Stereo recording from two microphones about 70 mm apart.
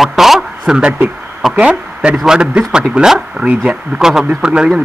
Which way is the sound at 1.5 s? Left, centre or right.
Centre.